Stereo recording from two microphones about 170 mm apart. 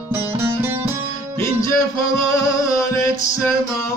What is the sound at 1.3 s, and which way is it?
Music, 20° left (ahead or behind).